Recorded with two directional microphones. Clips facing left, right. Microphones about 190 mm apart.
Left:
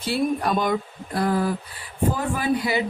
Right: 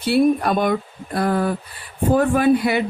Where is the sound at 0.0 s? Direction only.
60° right (ahead or behind).